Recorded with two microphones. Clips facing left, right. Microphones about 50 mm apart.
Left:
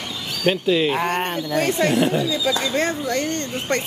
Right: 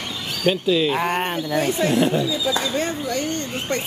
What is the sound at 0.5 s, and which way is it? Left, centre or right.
Speech, left.